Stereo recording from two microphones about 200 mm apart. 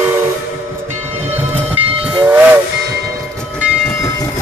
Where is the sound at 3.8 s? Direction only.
10° left (ahead or behind).